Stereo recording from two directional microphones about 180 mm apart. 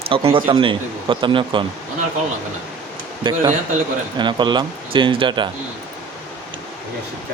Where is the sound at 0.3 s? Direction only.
30° right (ahead or behind).